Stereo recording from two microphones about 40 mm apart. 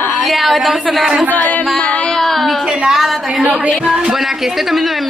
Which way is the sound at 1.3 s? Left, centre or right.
Left.